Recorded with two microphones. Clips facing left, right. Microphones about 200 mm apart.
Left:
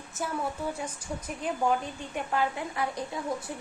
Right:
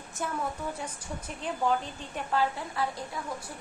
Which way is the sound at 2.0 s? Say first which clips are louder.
Even; 15° left (ahead or behind).